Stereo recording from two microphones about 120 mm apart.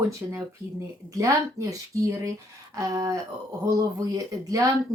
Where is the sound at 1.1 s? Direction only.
30° right (ahead or behind).